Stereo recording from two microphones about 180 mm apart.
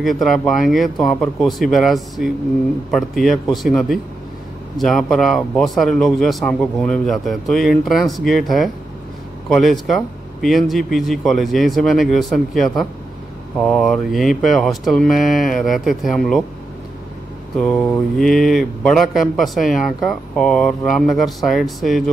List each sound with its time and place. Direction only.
0.0 s speech: centre (ahead or behind)
17.6 s speech: centre (ahead or behind)